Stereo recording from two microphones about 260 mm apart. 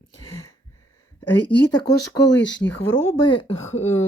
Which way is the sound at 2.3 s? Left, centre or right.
Left.